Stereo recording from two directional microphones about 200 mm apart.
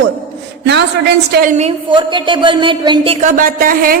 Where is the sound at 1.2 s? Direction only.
50° right (ahead or behind).